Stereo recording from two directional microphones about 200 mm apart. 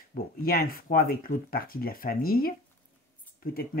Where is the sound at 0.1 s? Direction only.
50° left (ahead or behind).